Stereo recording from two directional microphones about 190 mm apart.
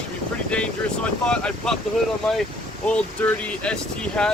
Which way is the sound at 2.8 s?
5° left (ahead or behind).